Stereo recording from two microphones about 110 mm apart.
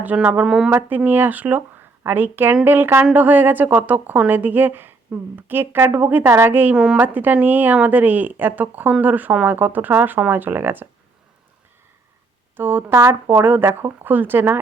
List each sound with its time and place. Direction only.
0.0 s a woman's voice: 15° right (ahead or behind)
0.7 s a woman's voice: 15° right (ahead or behind)
12.5 s speech: 20° right (ahead or behind)